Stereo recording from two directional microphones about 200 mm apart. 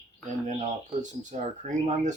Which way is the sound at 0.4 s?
35° right (ahead or behind).